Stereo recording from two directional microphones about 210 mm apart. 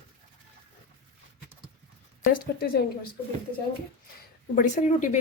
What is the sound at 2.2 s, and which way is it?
Speech, 40° left (ahead or behind).